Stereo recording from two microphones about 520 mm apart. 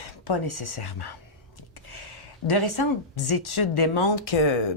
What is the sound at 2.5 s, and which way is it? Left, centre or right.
Speech, left.